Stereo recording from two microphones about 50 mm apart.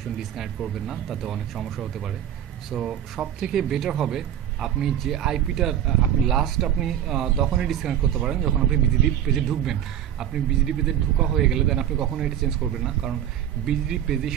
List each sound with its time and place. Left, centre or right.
0.8 s speech: centre; by 3.3 s right
3.3 s speech: centre